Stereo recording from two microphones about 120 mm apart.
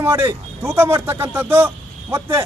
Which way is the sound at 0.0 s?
20° right (ahead or behind).